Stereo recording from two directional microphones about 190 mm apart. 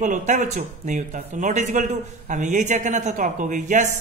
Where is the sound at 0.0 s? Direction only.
40° right (ahead or behind).